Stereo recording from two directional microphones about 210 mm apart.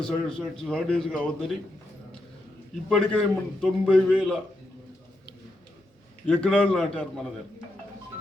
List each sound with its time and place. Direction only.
0.0 s a man's voice: 5° left (ahead or behind)
2.9 s a man's voice: centre (ahead or behind)
6.2 s a man's voice: 5° left (ahead or behind)